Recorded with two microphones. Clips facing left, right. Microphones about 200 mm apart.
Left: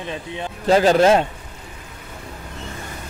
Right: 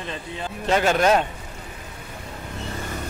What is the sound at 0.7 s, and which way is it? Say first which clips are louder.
Speech: left 5 dB; 35° left (ahead or behind).